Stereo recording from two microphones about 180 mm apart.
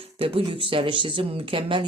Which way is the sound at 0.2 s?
30° right (ahead or behind).